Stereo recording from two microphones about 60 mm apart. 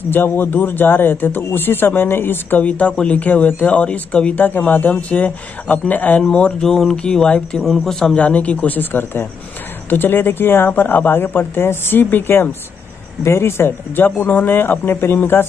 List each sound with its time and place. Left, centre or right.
0.1 s speech: left
2.6 s speech: left
6.2 s speech: centre; by 15.4 s left